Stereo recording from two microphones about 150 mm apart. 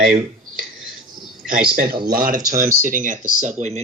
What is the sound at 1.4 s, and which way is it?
Speech, 75° right (ahead or behind).